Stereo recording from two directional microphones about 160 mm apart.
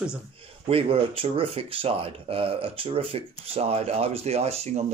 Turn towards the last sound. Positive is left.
turn(degrees=-40)  # may be behind; listen again after turning